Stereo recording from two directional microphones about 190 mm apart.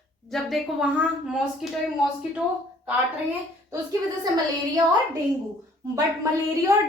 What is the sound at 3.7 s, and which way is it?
Speech, 20° right (ahead or behind).